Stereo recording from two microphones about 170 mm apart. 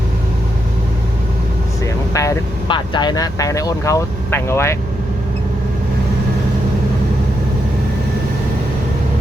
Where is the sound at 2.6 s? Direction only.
30° left (ahead or behind).